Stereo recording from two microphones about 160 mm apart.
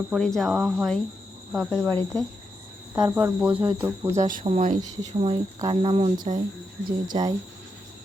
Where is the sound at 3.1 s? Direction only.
15° right (ahead or behind).